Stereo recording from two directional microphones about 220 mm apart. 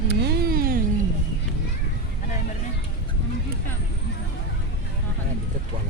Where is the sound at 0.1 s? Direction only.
50° right (ahead or behind).